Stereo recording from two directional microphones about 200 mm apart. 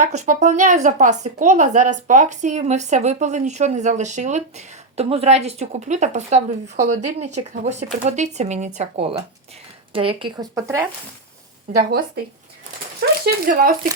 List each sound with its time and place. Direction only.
0.0 s speech: 35° right (ahead or behind); by 10.8 s 15° right (ahead or behind)
11.8 s speech: 50° right (ahead or behind)
13.2 s speech: 45° right (ahead or behind)